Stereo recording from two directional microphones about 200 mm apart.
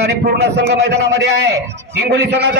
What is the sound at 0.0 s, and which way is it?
Speech, 55° right (ahead or behind).